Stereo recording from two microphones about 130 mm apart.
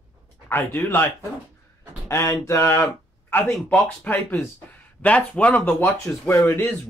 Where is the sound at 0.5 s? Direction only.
15° left (ahead or behind).